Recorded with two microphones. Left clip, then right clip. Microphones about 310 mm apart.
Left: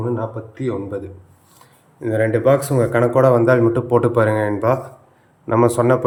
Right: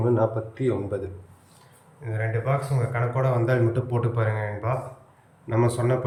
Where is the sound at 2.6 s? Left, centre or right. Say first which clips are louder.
Left 12 dB; centre.